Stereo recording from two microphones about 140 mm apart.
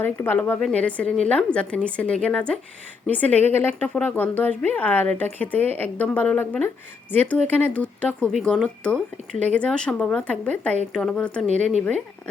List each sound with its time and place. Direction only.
0.0 s a woman's voice: 15° left (ahead or behind)
11.4 s speech: 55° right (ahead or behind)